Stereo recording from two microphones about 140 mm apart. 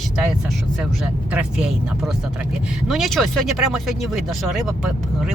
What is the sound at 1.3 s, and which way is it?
Speech, 5° right (ahead or behind).